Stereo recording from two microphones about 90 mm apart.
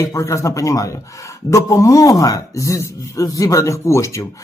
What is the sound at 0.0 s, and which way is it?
Speech, 35° left (ahead or behind).